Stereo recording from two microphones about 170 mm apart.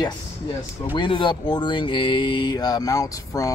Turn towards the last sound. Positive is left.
turn(degrees=20)  # may be behind; listen again after turning